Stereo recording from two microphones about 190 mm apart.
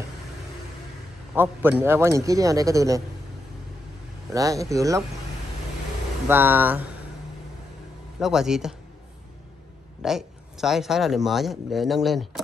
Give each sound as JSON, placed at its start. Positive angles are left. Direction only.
{"t": 1.3, "sound": "a man's voice", "side_deg": -10}
{"t": 4.3, "sound": "a man's voice", "side_deg": -15}
{"t": 6.2, "sound": "a man's voice", "side_deg": -10}
{"t": 8.2, "sound": "speech", "side_deg": 0}
{"t": 10.0, "sound": "speech", "side_deg": 0}